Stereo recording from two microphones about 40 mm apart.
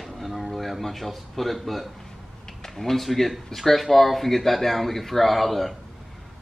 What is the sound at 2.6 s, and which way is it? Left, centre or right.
Speech, centre.